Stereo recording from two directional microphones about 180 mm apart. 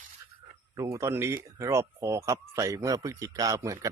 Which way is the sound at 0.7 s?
15° right (ahead or behind).